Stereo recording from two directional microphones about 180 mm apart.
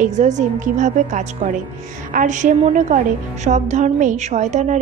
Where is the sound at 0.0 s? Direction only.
40° right (ahead or behind).